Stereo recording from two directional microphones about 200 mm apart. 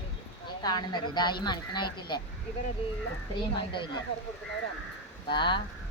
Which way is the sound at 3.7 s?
25° left (ahead or behind).